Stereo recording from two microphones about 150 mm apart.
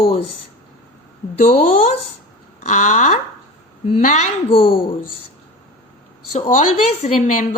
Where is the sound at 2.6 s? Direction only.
55° left (ahead or behind); by 4.7 s 40° left (ahead or behind).